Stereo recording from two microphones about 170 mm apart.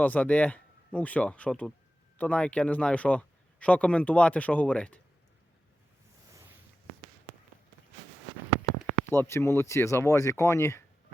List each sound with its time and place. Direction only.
0.0 s speech: 10° left (ahead or behind)
9.0 s speech: 15° left (ahead or behind)